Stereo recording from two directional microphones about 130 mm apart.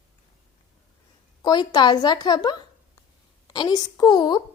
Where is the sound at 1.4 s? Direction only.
35° left (ahead or behind).